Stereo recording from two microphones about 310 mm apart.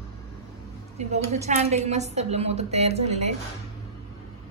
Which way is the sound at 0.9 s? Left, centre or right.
Right.